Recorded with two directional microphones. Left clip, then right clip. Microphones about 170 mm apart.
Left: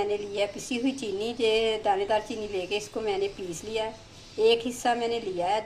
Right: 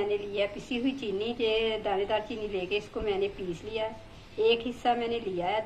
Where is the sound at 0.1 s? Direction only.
50° left (ahead or behind).